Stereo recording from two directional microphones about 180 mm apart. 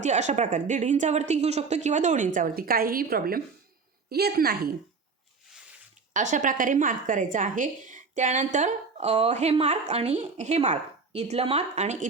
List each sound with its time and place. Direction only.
0.0 s a woman's voice: 40° right (ahead or behind); by 4.7 s 60° right (ahead or behind)
6.1 s a woman's voice: 45° right (ahead or behind)